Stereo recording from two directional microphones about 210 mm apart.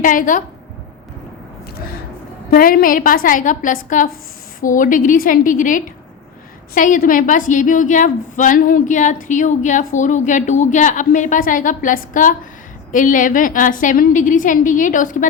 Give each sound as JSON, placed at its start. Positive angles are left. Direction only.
{"t": 0.0, "sound": "a woman's voice", "side_deg": 40}
{"t": 2.5, "sound": "a woman's voice", "side_deg": 45}